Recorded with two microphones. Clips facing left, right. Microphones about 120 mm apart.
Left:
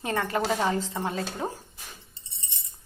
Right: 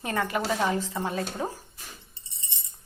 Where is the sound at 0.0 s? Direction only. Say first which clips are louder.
Even; 25° left (ahead or behind).